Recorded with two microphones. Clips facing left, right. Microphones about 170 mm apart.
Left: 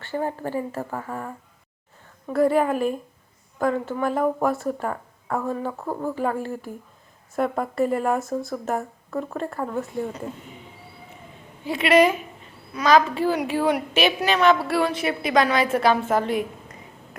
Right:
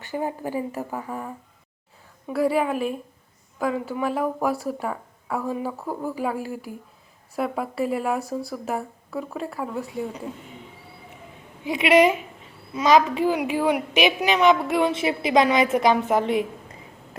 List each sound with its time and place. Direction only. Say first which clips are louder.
0.0 s a woman's voice: left 1 dB; 15° right (ahead or behind)
11.6 s a woman's voice: even; 15° right (ahead or behind)